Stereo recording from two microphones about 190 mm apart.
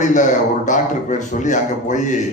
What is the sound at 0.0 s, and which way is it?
A man's voice, 40° left (ahead or behind).